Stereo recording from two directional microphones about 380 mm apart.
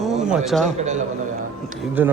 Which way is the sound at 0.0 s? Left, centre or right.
Centre.